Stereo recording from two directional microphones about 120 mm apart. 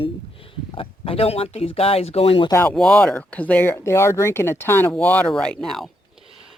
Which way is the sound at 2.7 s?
5° left (ahead or behind).